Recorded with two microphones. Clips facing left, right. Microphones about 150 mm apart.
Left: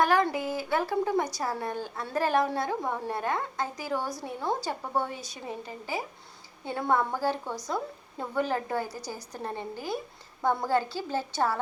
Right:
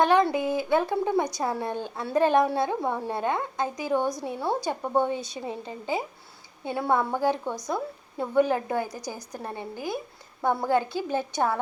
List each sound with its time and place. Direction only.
0.0 s a woman's voice: 20° right (ahead or behind)
6.7 s a woman's voice: 10° right (ahead or behind)